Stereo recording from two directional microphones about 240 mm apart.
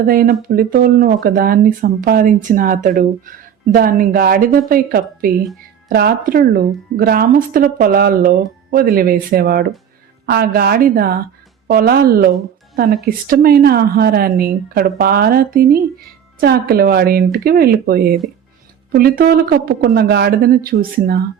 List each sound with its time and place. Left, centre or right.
0.1 s speech: right